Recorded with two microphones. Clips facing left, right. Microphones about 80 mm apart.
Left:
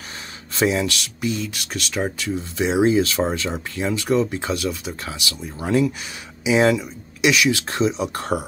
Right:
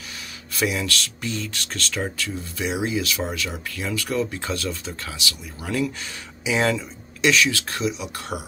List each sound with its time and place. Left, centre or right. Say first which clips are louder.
0.6 s speech: left 4 dB; left
8.0 s speech: left 7 dB; left